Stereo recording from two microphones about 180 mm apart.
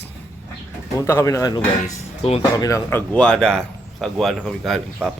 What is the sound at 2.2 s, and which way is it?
Speech, 35° left (ahead or behind).